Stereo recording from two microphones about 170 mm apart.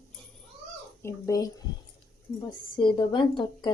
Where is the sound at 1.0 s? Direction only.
20° left (ahead or behind).